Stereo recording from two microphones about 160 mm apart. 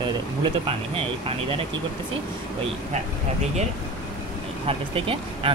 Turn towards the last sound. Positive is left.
turn(degrees=-35)  # may be behind; listen again after turning